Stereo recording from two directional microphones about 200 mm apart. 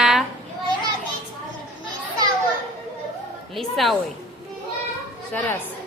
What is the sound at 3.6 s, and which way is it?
Speech, centre (ahead or behind).